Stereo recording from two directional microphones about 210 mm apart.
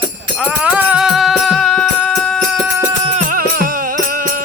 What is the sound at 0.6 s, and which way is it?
Music, 5° right (ahead or behind).